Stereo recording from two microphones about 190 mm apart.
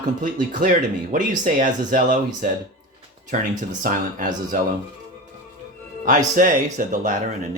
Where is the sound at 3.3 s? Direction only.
40° right (ahead or behind).